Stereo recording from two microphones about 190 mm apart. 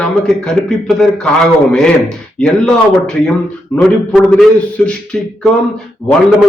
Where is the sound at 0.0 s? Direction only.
5° left (ahead or behind).